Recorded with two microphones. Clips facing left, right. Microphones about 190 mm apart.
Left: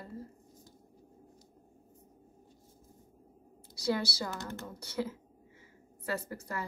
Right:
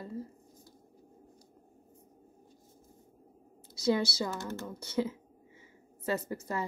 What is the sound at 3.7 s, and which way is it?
A woman's voice, 20° right (ahead or behind).